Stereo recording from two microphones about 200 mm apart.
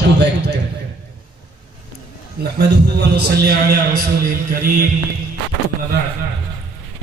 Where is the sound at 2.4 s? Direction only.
50° right (ahead or behind).